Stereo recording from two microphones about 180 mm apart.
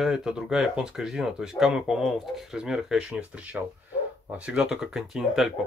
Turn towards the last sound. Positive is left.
turn(degrees=0)  # may be behind; listen again after turning